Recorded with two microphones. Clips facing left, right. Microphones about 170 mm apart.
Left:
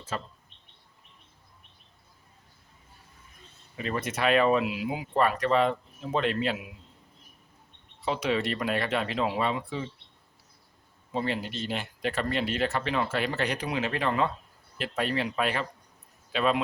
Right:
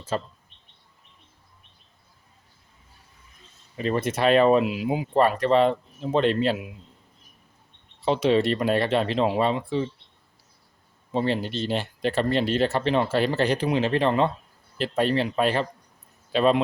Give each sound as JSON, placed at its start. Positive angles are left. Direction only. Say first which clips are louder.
{"t": 0.1, "sound": "speech", "louder": "right 7 dB", "side_deg": -30}
{"t": 3.8, "sound": "speech", "louder": "right 6 dB", "side_deg": -30}
{"t": 8.0, "sound": "speech", "louder": "right 7 dB", "side_deg": -30}
{"t": 11.1, "sound": "speech", "louder": "right 6 dB", "side_deg": -30}